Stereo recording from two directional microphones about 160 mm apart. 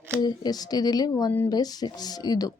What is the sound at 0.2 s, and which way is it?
A woman's voice, 25° left (ahead or behind).